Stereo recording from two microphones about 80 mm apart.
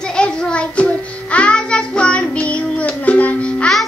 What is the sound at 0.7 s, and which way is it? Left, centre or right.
Music, centre.